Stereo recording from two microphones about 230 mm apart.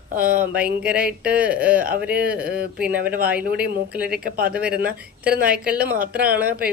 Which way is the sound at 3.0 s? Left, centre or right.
Right.